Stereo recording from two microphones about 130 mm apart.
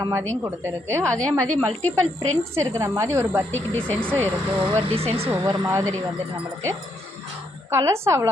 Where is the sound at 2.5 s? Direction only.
25° right (ahead or behind).